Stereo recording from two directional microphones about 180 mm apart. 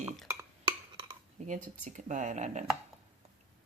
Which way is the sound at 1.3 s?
45° right (ahead or behind).